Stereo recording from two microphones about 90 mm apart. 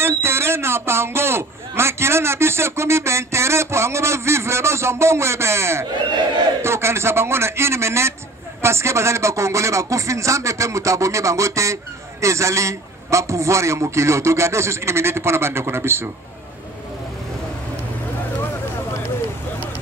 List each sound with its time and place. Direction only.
0.0 s a man's voice: 25° right (ahead or behind)